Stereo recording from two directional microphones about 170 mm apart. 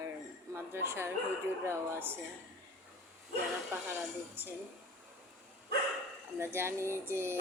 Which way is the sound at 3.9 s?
10° right (ahead or behind).